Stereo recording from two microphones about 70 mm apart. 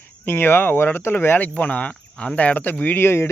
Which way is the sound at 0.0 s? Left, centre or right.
Left.